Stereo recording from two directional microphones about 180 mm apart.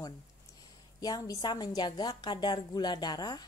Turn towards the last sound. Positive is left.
turn(degrees=20)  # may be behind; listen again after turning